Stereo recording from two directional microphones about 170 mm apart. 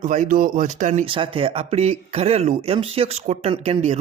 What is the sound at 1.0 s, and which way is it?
Speech, 30° right (ahead or behind).